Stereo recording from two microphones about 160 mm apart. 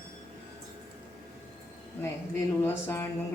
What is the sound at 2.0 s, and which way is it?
Speech, 15° left (ahead or behind).